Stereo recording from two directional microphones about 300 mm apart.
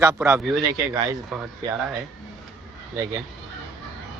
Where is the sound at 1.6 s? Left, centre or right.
Centre.